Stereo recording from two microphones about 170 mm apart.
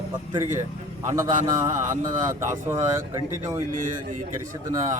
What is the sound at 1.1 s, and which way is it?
Speech, 20° right (ahead or behind).